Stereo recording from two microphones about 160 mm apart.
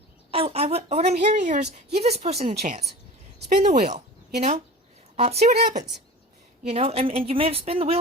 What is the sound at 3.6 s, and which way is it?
Speech, 45° right (ahead or behind).